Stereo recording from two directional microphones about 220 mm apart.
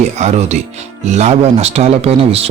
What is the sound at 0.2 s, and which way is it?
Speech, 30° right (ahead or behind).